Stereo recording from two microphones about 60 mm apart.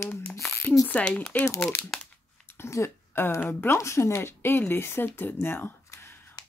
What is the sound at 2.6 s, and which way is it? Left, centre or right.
A woman's voice, left.